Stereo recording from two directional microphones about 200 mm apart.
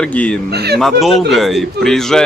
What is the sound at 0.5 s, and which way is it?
Speech, 55° right (ahead or behind).